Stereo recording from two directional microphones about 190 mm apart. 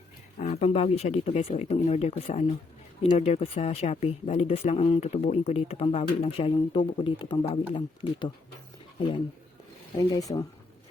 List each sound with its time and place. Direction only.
0.3 s speech: 35° left (ahead or behind); by 10.4 s 20° left (ahead or behind)